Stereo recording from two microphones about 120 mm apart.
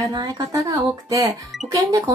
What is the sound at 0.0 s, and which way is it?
Speech, 30° right (ahead or behind).